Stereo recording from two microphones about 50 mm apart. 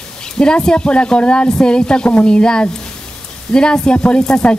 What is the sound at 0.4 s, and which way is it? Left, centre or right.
Speech, centre.